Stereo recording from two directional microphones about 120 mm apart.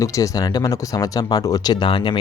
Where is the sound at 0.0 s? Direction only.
30° left (ahead or behind).